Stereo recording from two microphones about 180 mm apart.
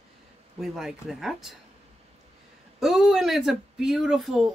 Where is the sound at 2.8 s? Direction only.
Centre (ahead or behind).